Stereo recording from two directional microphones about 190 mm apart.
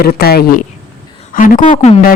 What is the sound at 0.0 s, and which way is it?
A woman's voice, 55° left (ahead or behind).